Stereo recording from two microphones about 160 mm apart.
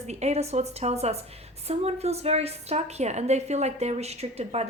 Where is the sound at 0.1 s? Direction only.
45° right (ahead or behind).